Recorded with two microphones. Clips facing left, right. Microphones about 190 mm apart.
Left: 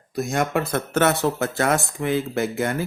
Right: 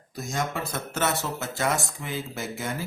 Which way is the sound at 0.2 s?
65° left (ahead or behind).